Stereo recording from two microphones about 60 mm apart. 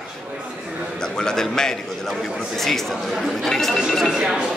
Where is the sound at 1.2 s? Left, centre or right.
Centre.